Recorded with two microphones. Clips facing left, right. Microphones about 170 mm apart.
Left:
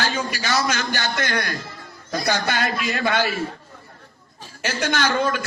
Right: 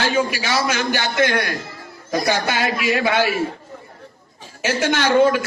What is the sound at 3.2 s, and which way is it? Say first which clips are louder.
Speech: right 4 dB; 55° right (ahead or behind).